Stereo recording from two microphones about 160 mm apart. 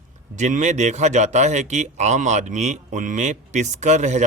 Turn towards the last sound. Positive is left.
turn(degrees=-45)  # may be behind; listen again after turning